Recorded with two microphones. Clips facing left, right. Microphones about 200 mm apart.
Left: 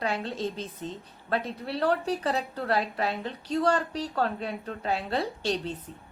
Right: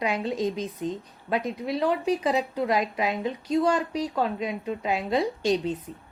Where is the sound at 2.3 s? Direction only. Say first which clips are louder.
Right 3 dB; 10° right (ahead or behind).